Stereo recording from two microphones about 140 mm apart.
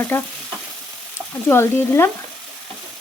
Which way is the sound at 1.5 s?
15° left (ahead or behind).